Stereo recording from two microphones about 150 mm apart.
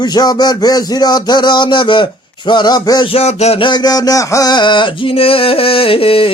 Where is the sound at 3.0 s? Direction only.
45° left (ahead or behind).